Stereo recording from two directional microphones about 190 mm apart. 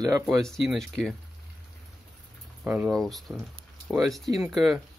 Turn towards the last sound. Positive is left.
turn(degrees=0)  # may be behind; listen again after turning